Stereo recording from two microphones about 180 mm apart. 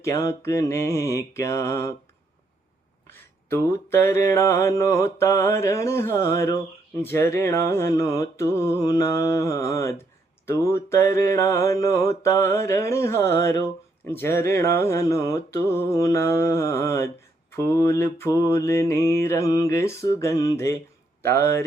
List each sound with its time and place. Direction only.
0.0 s mantra: 15° left (ahead or behind)
3.5 s mantra: 15° left (ahead or behind)
21.2 s speech: 15° left (ahead or behind)